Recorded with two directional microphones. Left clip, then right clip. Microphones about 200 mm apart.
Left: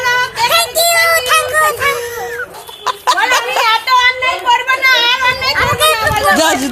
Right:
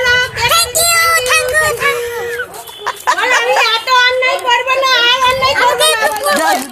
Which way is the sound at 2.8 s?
15° left (ahead or behind).